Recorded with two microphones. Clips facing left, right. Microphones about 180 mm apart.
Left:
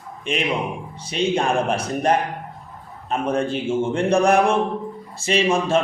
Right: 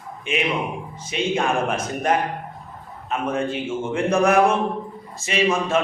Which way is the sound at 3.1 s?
35° left (ahead or behind).